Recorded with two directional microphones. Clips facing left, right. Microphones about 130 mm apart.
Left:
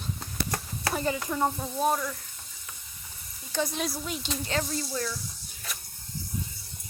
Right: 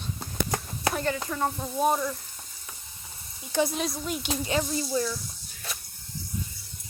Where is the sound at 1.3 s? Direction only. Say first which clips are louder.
Left 1 dB; 15° left (ahead or behind).